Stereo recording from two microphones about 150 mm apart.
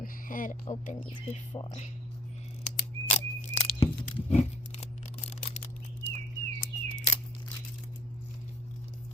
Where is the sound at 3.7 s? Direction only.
35° left (ahead or behind).